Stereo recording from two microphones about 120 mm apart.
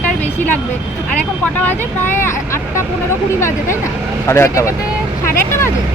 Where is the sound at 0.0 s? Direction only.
15° left (ahead or behind).